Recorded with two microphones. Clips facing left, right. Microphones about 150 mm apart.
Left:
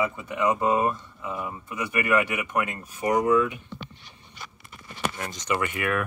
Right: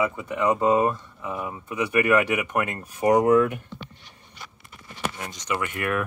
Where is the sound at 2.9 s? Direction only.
40° right (ahead or behind).